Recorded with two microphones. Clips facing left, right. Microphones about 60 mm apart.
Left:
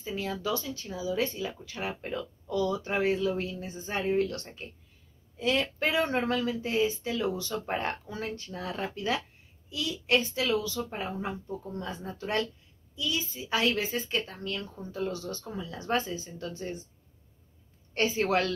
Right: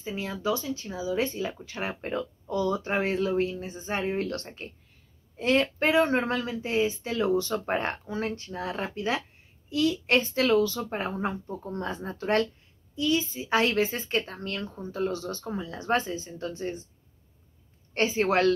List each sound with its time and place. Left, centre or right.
0.0 s speech: right
9.7 s speech: right
17.9 s speech: right